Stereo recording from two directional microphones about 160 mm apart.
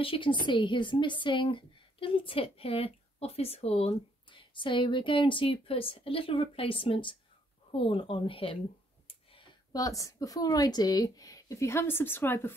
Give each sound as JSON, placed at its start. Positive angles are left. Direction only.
{"t": 0.0, "sound": "speech", "side_deg": 35}
{"t": 9.0, "sound": "clicking", "side_deg": 35}
{"t": 9.7, "sound": "speech", "side_deg": 20}